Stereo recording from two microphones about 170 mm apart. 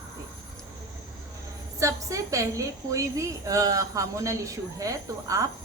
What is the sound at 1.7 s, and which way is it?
A woman's voice, 20° right (ahead or behind).